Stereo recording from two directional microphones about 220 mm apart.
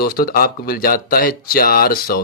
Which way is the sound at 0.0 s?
40° left (ahead or behind).